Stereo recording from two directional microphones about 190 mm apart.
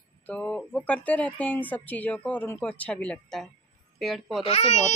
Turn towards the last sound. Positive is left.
turn(degrees=35)  # may be behind; listen again after turning